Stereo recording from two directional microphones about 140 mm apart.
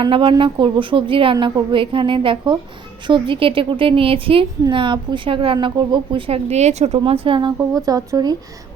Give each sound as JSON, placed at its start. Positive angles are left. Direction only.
{"t": 0.0, "sound": "a woman's voice", "side_deg": -35}
{"t": 7.0, "sound": "a woman's voice", "side_deg": -35}